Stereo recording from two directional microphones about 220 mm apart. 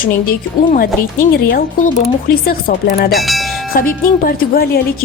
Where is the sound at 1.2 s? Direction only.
40° left (ahead or behind).